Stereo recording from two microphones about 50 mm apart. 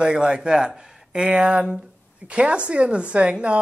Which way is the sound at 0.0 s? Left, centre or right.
Centre.